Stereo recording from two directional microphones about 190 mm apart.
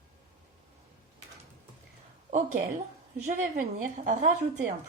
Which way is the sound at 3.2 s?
40° right (ahead or behind).